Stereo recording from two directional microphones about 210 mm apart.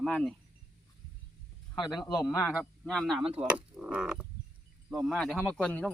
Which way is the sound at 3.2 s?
30° right (ahead or behind).